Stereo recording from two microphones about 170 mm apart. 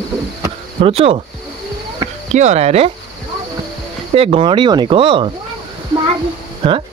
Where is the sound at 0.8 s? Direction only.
35° right (ahead or behind).